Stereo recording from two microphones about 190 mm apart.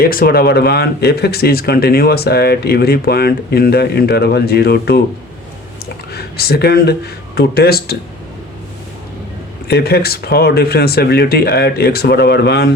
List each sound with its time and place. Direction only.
0.0 s speech: 50° left (ahead or behind)
6.1 s speech: 55° left (ahead or behind)
9.6 s speech: 55° left (ahead or behind)